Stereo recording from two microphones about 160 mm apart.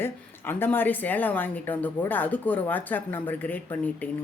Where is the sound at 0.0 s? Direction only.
15° left (ahead or behind).